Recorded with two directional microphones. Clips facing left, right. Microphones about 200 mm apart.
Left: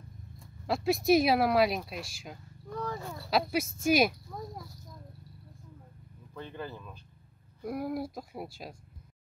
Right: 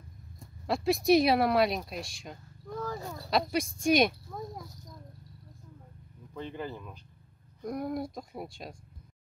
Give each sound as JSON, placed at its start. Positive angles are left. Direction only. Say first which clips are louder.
{"t": 0.7, "sound": "speech", "louder": "right 1 dB", "side_deg": 0}
{"t": 6.3, "sound": "speech", "louder": "right 3 dB", "side_deg": -15}
{"t": 7.6, "sound": "speech", "louder": "even", "side_deg": 5}